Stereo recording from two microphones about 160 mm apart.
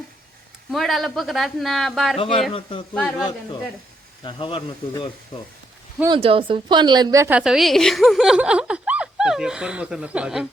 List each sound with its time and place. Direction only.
0.7 s a woman's voice: centre (ahead or behind)
2.1 s speech: 35° left (ahead or behind)
2.9 s a woman's voice: 5° left (ahead or behind)
4.2 s speech: 35° left (ahead or behind)
6.1 s a woman's voice: 35° right (ahead or behind); by 7.3 s 20° right (ahead or behind)
7.3 s a woman's voice: 5° right (ahead or behind)